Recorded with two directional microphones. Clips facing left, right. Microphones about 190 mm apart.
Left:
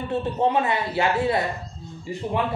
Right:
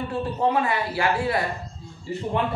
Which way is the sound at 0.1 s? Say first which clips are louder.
Left 2 dB; 20° left (ahead or behind).